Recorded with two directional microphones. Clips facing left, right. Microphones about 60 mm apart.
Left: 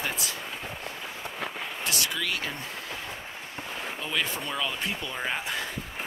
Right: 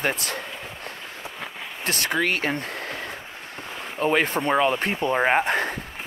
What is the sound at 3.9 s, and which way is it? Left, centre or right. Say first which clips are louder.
Speech: right 11 dB; right.